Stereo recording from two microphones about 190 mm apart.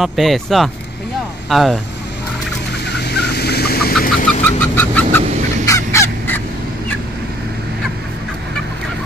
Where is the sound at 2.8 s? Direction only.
60° left (ahead or behind).